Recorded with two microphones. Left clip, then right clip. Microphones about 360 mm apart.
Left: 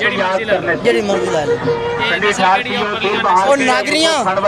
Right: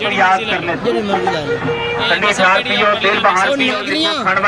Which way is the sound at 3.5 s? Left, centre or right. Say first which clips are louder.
Left 3 dB; centre.